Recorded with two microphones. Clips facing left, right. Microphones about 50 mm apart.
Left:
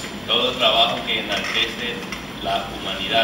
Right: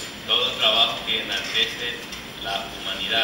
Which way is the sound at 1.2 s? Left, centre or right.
Left.